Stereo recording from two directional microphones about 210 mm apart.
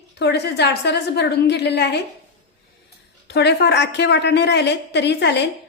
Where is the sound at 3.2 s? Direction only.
55° left (ahead or behind).